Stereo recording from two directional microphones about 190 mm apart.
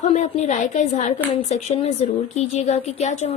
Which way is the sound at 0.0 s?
40° left (ahead or behind).